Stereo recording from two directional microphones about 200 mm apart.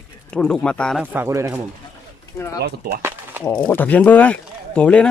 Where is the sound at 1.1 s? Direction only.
10° right (ahead or behind).